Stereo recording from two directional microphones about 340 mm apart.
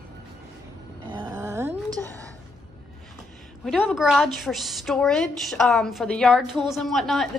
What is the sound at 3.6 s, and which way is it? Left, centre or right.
A woman's voice, centre.